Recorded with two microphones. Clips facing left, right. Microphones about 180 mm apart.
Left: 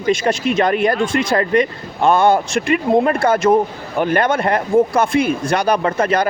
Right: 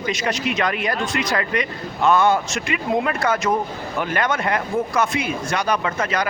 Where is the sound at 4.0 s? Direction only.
45° left (ahead or behind).